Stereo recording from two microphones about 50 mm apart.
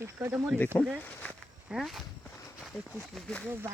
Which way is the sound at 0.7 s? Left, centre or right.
Left.